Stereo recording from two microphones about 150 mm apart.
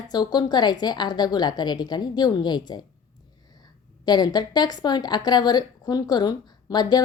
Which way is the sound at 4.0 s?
25° left (ahead or behind).